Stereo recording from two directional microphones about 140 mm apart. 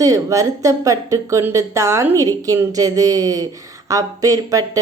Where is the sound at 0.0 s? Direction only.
25° right (ahead or behind).